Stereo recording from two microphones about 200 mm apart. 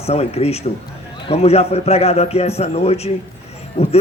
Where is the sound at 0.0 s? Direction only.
30° left (ahead or behind).